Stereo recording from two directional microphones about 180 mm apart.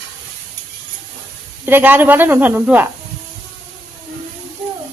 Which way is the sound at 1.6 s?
10° right (ahead or behind).